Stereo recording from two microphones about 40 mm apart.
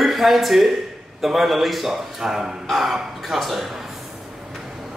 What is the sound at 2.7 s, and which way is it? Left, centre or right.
Speech, centre.